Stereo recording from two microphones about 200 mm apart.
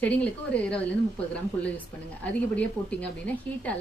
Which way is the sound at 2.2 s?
5° left (ahead or behind).